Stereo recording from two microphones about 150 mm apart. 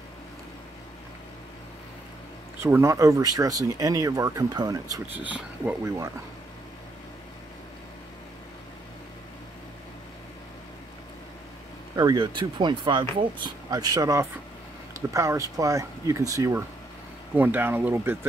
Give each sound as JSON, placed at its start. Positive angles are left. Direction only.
{"t": 2.6, "sound": "speech", "side_deg": -20}
{"t": 5.1, "sound": "speech", "side_deg": -10}
{"t": 11.9, "sound": "speech", "side_deg": -25}